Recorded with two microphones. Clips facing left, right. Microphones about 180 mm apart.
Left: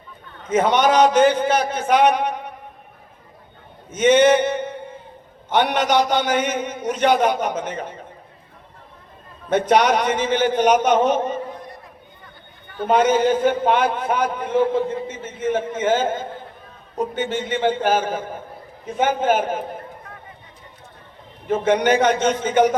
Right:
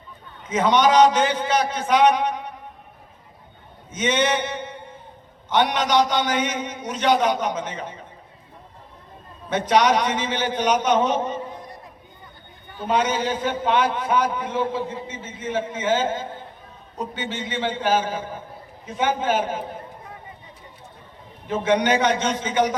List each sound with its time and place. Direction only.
0.4 s a man's voice: 55° left (ahead or behind)
3.9 s a sound: 55° left (ahead or behind)
5.7 s a man's voice: 55° left (ahead or behind)
9.5 s a man's voice: 55° left (ahead or behind)
12.8 s a man's voice: 55° left (ahead or behind)
21.4 s a man's voice: 50° left (ahead or behind)